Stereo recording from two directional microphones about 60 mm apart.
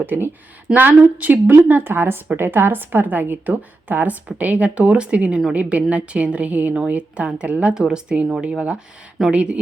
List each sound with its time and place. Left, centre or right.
0.0 s a woman's voice: right; by 8.3 s centre
9.3 s speech: centre